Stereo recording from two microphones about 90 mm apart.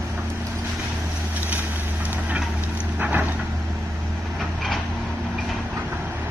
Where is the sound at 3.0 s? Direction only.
15° right (ahead or behind).